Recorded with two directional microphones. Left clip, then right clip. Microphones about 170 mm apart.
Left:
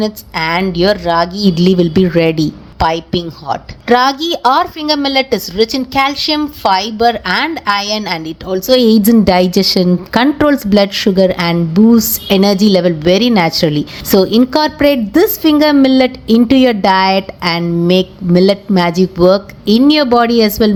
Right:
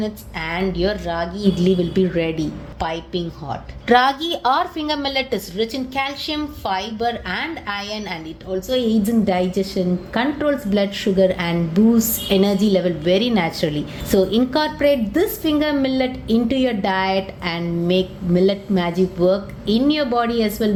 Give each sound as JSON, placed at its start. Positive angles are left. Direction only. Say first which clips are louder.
{"t": 0.0, "sound": "a woman's voice", "louder": "left 10 dB", "side_deg": 35}